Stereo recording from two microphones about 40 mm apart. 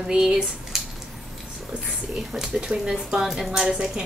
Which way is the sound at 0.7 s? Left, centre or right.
Centre.